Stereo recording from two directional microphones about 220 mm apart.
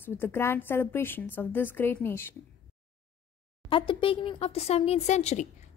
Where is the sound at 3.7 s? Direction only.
20° left (ahead or behind).